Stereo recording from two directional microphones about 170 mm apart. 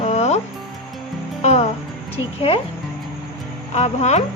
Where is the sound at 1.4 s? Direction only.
40° left (ahead or behind).